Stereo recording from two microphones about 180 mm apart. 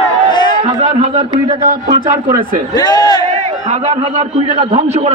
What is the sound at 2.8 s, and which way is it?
Speech, 25° left (ahead or behind).